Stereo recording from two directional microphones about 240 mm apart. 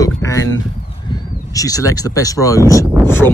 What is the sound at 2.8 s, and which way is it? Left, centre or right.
Speech, centre.